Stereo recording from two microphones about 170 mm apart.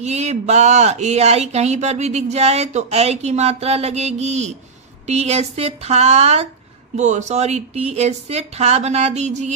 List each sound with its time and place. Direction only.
0.0 s speech: 40° right (ahead or behind)